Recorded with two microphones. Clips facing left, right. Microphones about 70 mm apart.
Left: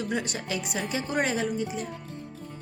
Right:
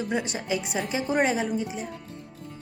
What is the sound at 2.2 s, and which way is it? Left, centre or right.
Music, left.